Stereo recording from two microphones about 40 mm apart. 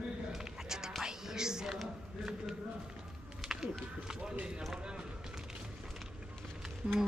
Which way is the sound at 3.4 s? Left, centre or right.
Centre.